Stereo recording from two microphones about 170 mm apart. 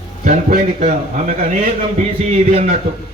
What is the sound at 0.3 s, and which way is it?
Speech, 50° right (ahead or behind).